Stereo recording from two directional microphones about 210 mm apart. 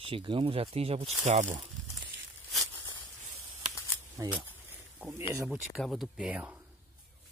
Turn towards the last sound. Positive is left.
turn(degrees=-5)  # may be behind; listen again after turning